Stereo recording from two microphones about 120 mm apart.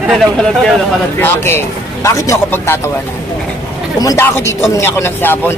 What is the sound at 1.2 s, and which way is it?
Speech, 20° left (ahead or behind).